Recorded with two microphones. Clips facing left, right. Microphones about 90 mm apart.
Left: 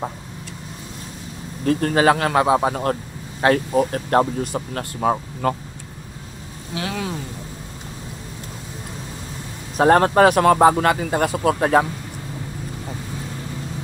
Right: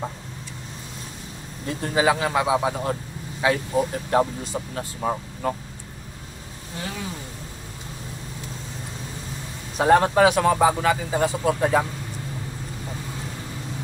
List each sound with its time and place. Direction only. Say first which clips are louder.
1.7 s speech: left 5 dB; 60° left (ahead or behind)
6.7 s speech: left 6 dB; 75° left (ahead or behind)
9.8 s speech: left 3 dB; 50° left (ahead or behind)